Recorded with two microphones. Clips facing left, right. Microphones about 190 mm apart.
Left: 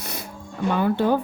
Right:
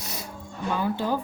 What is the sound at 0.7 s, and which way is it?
Speech, 60° left (ahead or behind).